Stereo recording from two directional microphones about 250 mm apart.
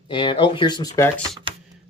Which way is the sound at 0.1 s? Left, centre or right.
Centre.